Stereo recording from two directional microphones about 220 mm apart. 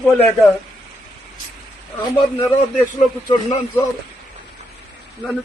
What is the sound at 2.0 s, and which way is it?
Speech, 20° left (ahead or behind).